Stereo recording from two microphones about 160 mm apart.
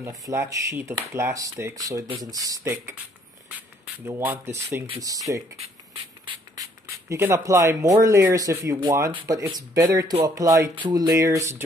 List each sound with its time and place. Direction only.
0.0 s speech: 20° right (ahead or behind)
4.2 s speech: 10° right (ahead or behind)
6.2 s a sound: 20° right (ahead or behind)
8.0 s speech: 15° right (ahead or behind)